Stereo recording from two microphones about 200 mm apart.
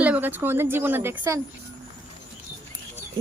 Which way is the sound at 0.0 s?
10° right (ahead or behind).